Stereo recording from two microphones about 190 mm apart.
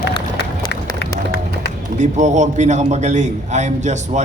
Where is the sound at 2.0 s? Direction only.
40° right (ahead or behind).